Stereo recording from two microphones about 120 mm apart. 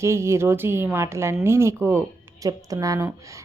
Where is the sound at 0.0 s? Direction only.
20° right (ahead or behind).